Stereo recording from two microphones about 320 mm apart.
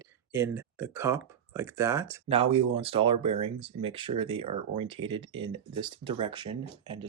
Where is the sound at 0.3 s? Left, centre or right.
Centre.